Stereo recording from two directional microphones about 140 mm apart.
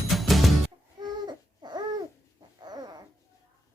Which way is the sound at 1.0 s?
30° right (ahead or behind).